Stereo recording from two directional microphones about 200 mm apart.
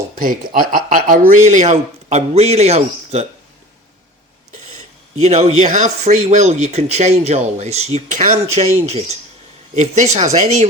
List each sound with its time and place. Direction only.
0.2 s speech: 45° right (ahead or behind)
5.2 s speech: 35° right (ahead or behind)